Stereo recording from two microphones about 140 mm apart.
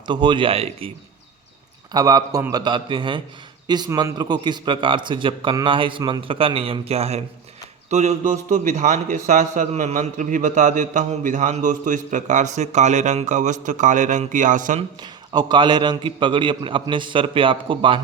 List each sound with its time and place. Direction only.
0.1 s a man's voice: 35° right (ahead or behind)
1.9 s a man's voice: 25° right (ahead or behind); by 14.8 s 65° right (ahead or behind)
15.0 s a man's voice: 30° right (ahead or behind)